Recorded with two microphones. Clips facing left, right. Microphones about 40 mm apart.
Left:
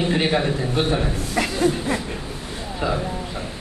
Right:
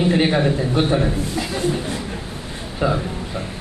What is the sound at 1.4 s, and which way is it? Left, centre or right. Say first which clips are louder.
Chuckle: left 3 dB; left.